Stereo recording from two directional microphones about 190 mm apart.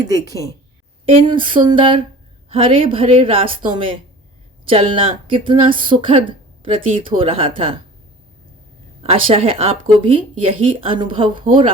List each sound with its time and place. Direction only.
0.0 s speech: 20° right (ahead or behind)
9.0 s speech: 30° right (ahead or behind)